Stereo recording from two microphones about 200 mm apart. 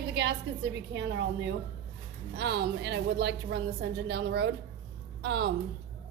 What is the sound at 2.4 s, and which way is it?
A woman's voice, 60° right (ahead or behind).